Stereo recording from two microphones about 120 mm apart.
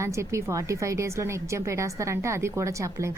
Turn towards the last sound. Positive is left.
turn(degrees=-25)  # may be behind; listen again after turning